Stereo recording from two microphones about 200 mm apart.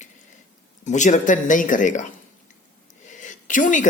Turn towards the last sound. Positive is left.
turn(degrees=40)  # may be behind; listen again after turning